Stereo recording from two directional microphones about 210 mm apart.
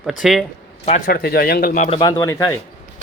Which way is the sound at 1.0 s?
45° left (ahead or behind).